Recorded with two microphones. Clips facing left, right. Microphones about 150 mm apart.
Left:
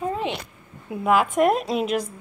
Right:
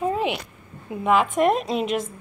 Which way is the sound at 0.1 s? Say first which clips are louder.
Right 3 dB; 15° right (ahead or behind).